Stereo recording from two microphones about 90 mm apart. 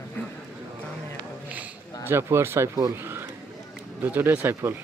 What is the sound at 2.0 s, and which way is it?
Speech, 30° right (ahead or behind).